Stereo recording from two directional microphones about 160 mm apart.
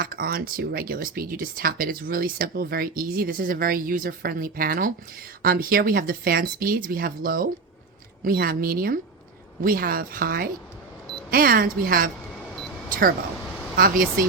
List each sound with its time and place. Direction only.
0.0 s speech: 65° right (ahead or behind)